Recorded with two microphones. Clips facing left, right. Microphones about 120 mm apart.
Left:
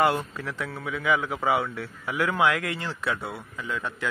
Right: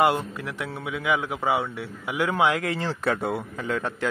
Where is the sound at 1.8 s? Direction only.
20° right (ahead or behind); by 3.8 s 55° right (ahead or behind).